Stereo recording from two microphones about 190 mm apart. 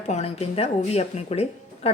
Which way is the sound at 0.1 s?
35° left (ahead or behind).